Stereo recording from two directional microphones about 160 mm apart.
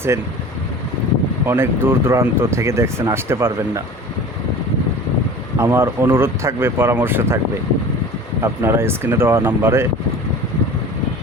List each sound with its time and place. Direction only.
1.5 s speech: 15° right (ahead or behind)
5.5 s speech: 15° right (ahead or behind)
8.4 s speech: 15° right (ahead or behind)